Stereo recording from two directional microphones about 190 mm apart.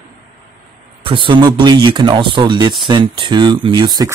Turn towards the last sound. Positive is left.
turn(degrees=-20)  # may be behind; listen again after turning